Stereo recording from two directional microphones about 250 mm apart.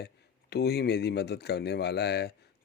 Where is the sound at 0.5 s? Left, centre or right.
Left.